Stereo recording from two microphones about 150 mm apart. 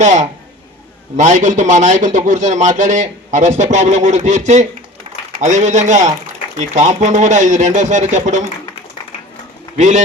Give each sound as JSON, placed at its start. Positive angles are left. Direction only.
{"t": 0.0, "sound": "a man's voice", "side_deg": -50}
{"t": 5.1, "sound": "a sound", "side_deg": -40}
{"t": 5.4, "sound": "a man's voice", "side_deg": -50}
{"t": 9.7, "sound": "a man's voice", "side_deg": -55}